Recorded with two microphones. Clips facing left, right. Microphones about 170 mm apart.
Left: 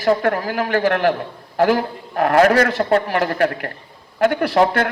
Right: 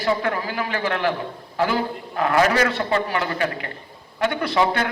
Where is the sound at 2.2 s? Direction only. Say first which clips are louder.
Left 5 dB; 55° left (ahead or behind).